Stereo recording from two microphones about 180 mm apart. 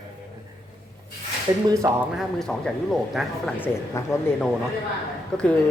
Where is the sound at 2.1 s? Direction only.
5° left (ahead or behind).